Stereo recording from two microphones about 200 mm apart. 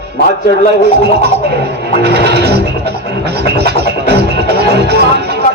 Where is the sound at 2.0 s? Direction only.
55° right (ahead or behind).